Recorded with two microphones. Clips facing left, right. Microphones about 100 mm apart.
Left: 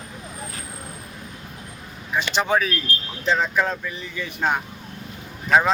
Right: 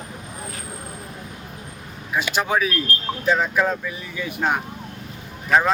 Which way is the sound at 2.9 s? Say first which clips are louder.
Right 2 dB; 50° right (ahead or behind).